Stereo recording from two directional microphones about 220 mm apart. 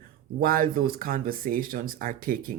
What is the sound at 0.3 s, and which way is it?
Speech, 40° right (ahead or behind).